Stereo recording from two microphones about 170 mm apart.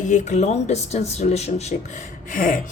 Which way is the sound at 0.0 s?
45° left (ahead or behind).